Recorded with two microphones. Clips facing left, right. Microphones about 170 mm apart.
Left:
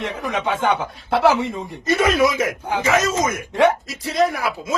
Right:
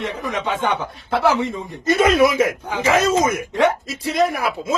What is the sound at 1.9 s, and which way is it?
Speech, 20° right (ahead or behind).